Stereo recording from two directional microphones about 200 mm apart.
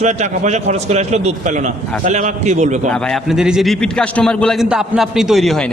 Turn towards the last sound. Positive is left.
turn(degrees=0)  # may be behind; listen again after turning